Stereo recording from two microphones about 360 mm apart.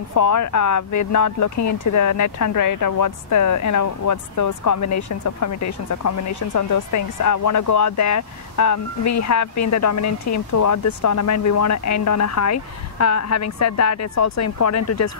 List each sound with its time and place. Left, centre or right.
0.1 s speech: left